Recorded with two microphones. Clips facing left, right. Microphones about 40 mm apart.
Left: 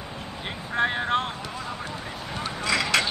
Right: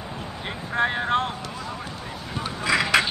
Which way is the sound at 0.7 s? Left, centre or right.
Centre.